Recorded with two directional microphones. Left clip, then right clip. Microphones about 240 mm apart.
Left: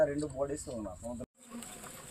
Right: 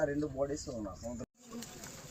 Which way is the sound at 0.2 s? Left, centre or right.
Centre.